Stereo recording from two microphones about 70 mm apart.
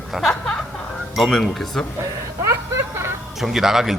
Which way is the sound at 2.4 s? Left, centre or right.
Right.